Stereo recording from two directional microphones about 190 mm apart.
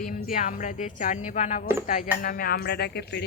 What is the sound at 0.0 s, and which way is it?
Speech, 50° left (ahead or behind).